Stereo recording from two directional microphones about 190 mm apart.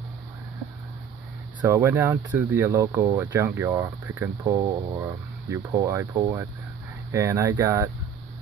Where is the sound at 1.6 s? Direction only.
15° right (ahead or behind).